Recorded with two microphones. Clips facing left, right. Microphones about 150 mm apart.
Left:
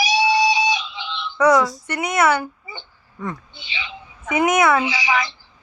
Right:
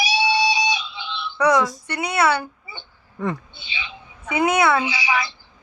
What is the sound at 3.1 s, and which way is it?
Speech, 75° right (ahead or behind).